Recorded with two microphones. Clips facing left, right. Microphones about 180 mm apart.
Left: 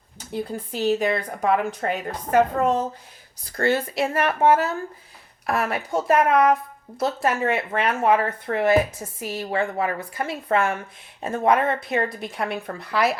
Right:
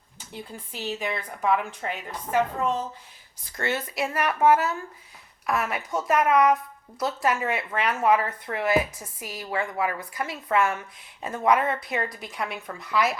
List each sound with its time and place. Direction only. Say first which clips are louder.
0.4 s a woman's voice: left 10 dB; 40° left (ahead or behind)
3.6 s a woman's voice: left 6 dB; 30° left (ahead or behind)
6.2 s a woman's voice: right 2 dB; 55° left (ahead or behind)
7.0 s speech: left 3 dB; 25° left (ahead or behind)